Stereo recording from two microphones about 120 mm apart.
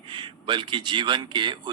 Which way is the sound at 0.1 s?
45° right (ahead or behind).